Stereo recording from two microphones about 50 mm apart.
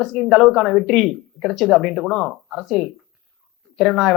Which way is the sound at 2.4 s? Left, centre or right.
Centre.